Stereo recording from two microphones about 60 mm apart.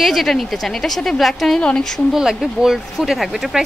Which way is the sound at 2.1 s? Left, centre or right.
Centre.